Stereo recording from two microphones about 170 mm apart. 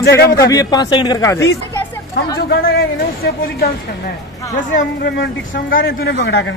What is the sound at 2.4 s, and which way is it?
Speech, 65° left (ahead or behind).